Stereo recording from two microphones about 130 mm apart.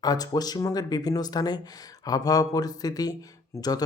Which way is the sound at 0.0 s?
30° left (ahead or behind).